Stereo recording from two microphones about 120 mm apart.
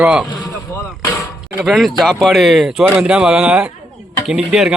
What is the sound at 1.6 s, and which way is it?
Speech, centre (ahead or behind).